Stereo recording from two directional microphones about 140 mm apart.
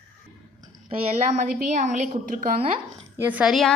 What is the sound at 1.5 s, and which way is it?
A woman's voice, 70° right (ahead or behind).